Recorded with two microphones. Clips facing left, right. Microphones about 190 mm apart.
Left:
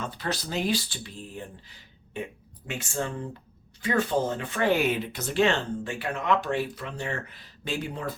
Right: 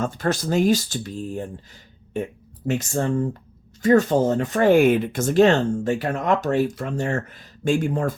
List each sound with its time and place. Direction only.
0.0 s speech: 45° right (ahead or behind)
2.6 s speech: 40° right (ahead or behind)